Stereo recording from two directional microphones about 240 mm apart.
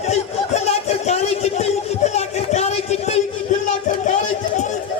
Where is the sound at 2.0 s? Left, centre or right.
Left.